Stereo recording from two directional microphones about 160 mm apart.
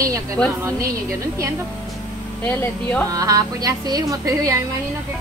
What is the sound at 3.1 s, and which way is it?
A woman's voice, 20° right (ahead or behind).